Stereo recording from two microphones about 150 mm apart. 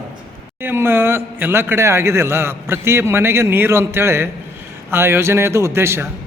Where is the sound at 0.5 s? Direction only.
15° right (ahead or behind).